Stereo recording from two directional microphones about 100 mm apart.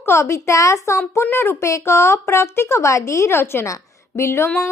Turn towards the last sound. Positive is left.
turn(degrees=25)  # may be behind; listen again after turning